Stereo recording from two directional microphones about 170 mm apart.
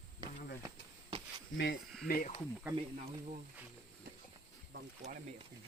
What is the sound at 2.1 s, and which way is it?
Speech, 60° left (ahead or behind).